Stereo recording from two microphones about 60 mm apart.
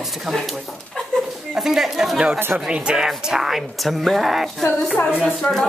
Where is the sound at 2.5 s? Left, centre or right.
Centre.